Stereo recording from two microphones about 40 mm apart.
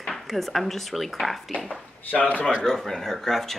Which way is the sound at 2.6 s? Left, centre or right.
Centre.